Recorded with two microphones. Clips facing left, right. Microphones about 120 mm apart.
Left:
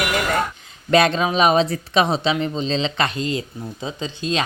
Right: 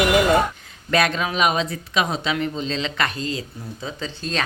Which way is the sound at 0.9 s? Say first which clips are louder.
Left 4 dB; 25° left (ahead or behind).